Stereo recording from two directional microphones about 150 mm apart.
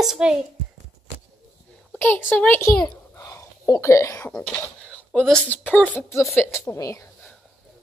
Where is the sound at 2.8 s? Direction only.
20° left (ahead or behind).